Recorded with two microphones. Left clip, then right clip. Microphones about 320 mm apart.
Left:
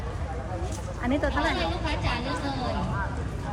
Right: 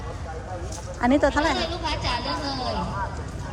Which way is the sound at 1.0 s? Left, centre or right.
Centre.